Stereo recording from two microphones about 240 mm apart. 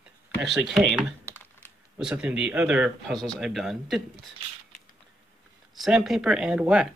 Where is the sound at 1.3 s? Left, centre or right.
Centre.